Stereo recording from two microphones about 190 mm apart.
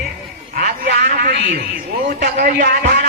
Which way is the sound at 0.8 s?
55° right (ahead or behind).